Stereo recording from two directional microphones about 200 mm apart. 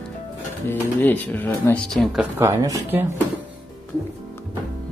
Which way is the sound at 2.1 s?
10° right (ahead or behind).